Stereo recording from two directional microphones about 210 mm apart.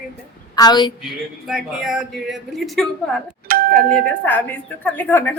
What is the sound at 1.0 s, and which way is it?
Speech, centre (ahead or behind).